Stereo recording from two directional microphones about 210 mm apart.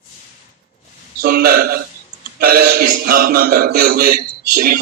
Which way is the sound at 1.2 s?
45° right (ahead or behind).